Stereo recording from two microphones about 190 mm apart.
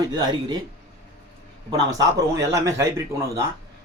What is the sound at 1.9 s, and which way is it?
A man's voice, 15° right (ahead or behind).